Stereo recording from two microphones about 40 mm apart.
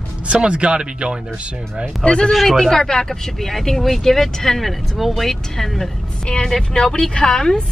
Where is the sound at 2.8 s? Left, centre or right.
Centre.